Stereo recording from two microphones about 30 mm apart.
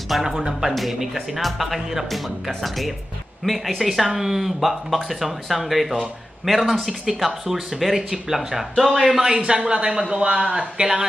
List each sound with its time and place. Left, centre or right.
0.2 s speech: centre
1.3 s speech: centre
4.0 s speech: centre
7.4 s speech: centre
9.1 s a man's voice: centre
9.5 s speech: right